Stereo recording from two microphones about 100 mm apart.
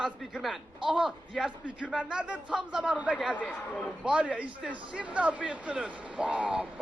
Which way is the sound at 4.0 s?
10° right (ahead or behind).